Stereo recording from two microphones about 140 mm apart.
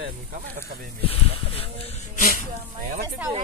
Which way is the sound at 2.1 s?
70° left (ahead or behind).